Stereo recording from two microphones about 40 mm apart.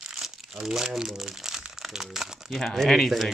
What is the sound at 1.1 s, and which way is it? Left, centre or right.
Speech, centre.